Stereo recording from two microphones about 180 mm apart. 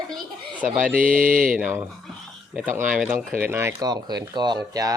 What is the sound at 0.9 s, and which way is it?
Speech, 50° right (ahead or behind).